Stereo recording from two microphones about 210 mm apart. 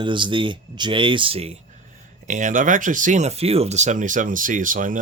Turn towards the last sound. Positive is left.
turn(degrees=-40)  # may be behind; listen again after turning